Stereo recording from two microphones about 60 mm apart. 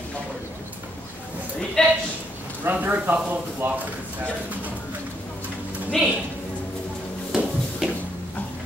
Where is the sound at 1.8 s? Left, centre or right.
Centre.